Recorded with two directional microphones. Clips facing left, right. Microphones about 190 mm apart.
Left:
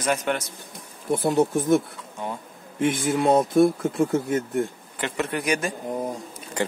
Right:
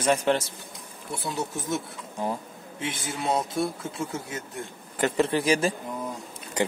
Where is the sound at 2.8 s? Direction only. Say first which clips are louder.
Left 10 dB; 50° left (ahead or behind).